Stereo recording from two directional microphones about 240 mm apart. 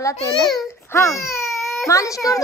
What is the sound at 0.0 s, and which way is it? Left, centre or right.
A woman's voice, centre.